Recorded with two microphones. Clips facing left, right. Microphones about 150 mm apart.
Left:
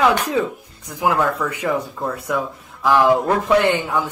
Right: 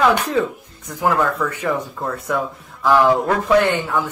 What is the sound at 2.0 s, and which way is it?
Speech, centre (ahead or behind).